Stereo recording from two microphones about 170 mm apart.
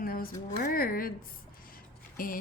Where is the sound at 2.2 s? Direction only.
55° left (ahead or behind).